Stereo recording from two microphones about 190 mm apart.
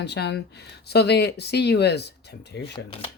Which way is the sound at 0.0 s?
60° left (ahead or behind).